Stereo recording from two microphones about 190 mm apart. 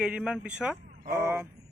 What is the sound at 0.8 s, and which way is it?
Vehicle, 50° right (ahead or behind).